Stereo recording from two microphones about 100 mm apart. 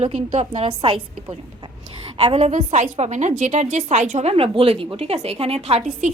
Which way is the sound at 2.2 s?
90° right.